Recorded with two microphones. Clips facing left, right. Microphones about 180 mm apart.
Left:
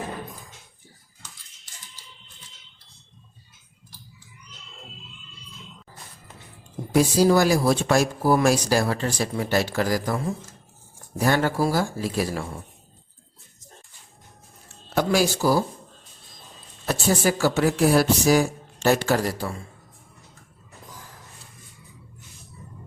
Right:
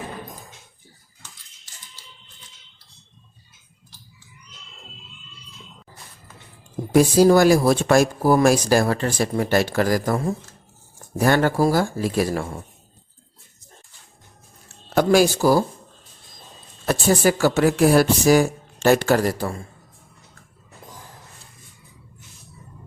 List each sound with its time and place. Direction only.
6.9 s speech: 50° right (ahead or behind)
11.2 s speech: 55° right (ahead or behind)
14.9 s speech: 50° right (ahead or behind)
16.8 s speech: 55° right (ahead or behind)